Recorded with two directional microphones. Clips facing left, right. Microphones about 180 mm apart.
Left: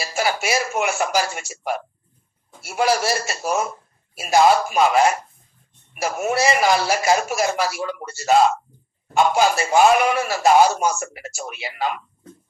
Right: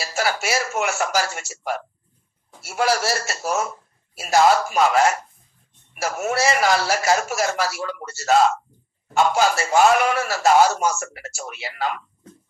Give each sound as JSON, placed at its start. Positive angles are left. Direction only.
{"t": 0.0, "sound": "a man's voice", "side_deg": 15}